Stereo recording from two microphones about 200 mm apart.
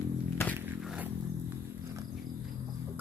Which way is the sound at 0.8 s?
Centre (ahead or behind).